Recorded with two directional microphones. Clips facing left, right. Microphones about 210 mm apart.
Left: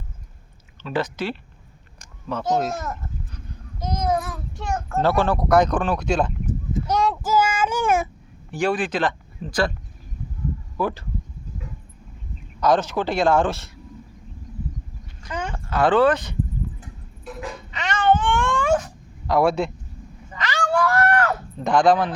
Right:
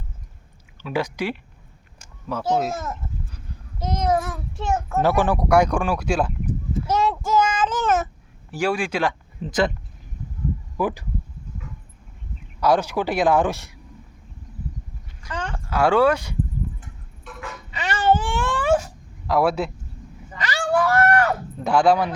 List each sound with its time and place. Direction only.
0.8 s speech: 10° right (ahead or behind)
3.8 s a sound: centre (ahead or behind)
4.9 s a child's voice: 15° right (ahead or behind); by 8.1 s 10° left (ahead or behind)
8.4 s speech: 5° right (ahead or behind)
10.8 s speech: 15° right (ahead or behind)
12.5 s speech: 10° right (ahead or behind)
15.3 s a sound: 10° left (ahead or behind)
15.7 s speech: 10° right (ahead or behind)
17.2 s vehicle: 35° left (ahead or behind)
17.7 s cat: 5° right (ahead or behind)
19.3 s speech: 5° right (ahead or behind)
20.3 s a sound: 15° right (ahead or behind)